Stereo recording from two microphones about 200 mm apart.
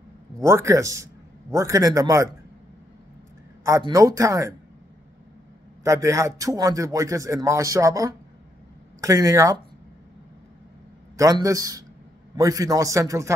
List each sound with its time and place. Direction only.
0.4 s a man's voice: 15° right (ahead or behind)
3.6 s a man's voice: 15° right (ahead or behind)
5.9 s a man's voice: 15° right (ahead or behind)
11.1 s a man's voice: 15° right (ahead or behind)